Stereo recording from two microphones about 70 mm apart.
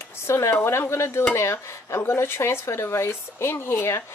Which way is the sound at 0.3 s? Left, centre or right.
Left.